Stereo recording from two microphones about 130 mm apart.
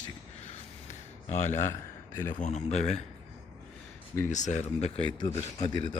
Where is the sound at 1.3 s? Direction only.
65° left (ahead or behind).